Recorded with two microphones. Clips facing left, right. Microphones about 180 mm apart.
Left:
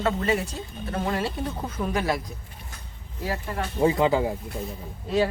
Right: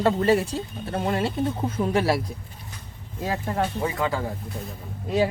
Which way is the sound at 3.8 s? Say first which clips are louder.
Left 5 dB; 25° left (ahead or behind).